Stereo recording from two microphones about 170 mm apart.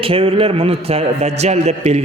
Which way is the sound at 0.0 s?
35° right (ahead or behind).